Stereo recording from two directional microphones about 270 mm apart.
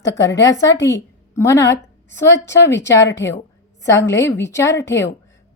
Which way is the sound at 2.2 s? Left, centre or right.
Left.